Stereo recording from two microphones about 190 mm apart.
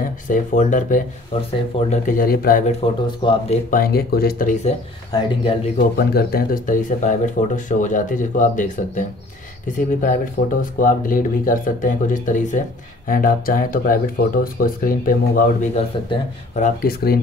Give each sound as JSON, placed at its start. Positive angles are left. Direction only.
{"t": 0.0, "sound": "speech", "side_deg": 45}
{"t": 2.8, "sound": "speech", "side_deg": 30}
{"t": 3.7, "sound": "speech", "side_deg": 50}
{"t": 5.1, "sound": "speech", "side_deg": 25}
{"t": 5.8, "sound": "speech", "side_deg": 50}
{"t": 10.0, "sound": "speech", "side_deg": 45}
{"t": 16.8, "sound": "speech", "side_deg": 55}